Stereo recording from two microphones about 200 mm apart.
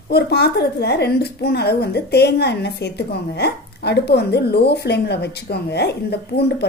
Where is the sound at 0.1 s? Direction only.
55° left (ahead or behind).